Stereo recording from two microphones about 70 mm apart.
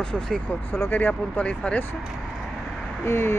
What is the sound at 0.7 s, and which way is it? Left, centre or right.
Speech, left.